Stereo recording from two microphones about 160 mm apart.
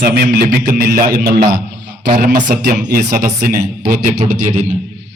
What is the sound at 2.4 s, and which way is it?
Speech, 65° right (ahead or behind).